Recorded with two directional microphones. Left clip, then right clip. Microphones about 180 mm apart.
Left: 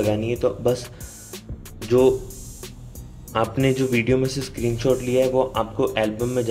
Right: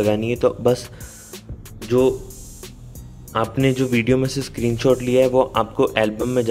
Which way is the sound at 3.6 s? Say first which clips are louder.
Right 3 dB; 20° right (ahead or behind).